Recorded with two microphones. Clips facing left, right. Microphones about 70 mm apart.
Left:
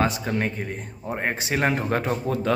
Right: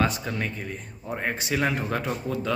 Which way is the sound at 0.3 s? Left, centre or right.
Left.